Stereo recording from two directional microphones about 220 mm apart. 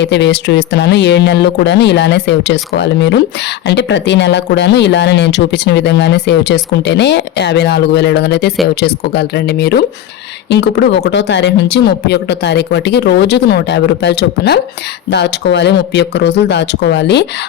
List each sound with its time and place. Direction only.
0.0 s speech: 50° left (ahead or behind)